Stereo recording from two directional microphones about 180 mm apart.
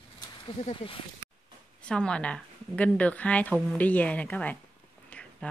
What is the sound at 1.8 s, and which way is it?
A woman's voice, 5° left (ahead or behind).